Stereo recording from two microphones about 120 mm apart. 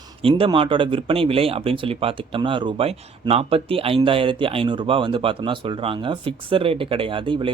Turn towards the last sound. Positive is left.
turn(degrees=-45)  # may be behind; listen again after turning